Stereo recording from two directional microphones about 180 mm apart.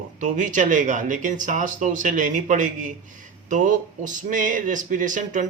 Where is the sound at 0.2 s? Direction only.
45° right (ahead or behind).